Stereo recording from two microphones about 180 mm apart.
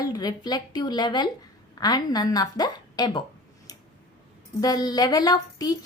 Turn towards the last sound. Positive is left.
turn(degrees=20)  # may be behind; listen again after turning